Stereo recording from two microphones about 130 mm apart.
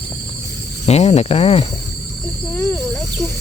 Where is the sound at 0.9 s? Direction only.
55° left (ahead or behind).